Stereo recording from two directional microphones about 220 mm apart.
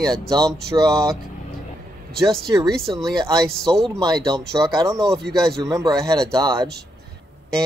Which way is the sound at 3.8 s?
20° right (ahead or behind).